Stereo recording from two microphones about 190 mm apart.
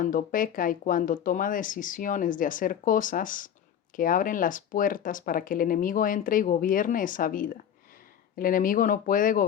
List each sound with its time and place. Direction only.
0.0 s speech: 45° left (ahead or behind)